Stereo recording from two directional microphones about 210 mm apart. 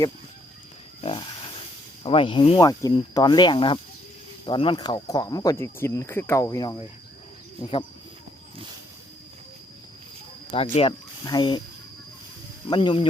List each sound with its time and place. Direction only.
2.0 s speech: 25° left (ahead or behind)
10.5 s speech: 25° left (ahead or behind)
12.6 s speech: 20° left (ahead or behind)